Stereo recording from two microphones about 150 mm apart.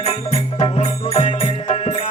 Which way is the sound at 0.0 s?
45° left (ahead or behind).